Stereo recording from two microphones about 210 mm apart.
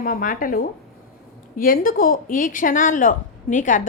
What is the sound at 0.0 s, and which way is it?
A woman's voice, 40° left (ahead or behind).